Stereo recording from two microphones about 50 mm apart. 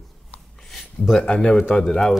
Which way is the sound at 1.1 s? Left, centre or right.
Left.